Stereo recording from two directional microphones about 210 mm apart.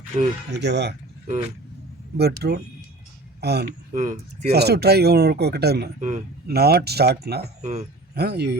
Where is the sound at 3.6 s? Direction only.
35° right (ahead or behind).